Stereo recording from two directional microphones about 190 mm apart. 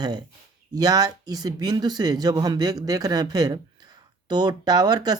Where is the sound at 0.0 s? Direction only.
20° right (ahead or behind).